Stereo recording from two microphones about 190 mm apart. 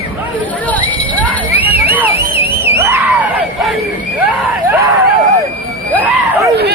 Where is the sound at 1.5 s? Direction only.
10° right (ahead or behind).